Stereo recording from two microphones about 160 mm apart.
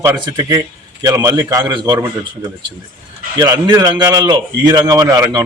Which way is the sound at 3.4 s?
25° right (ahead or behind).